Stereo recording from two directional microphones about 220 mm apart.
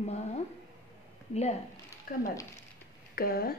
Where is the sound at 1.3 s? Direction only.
30° left (ahead or behind).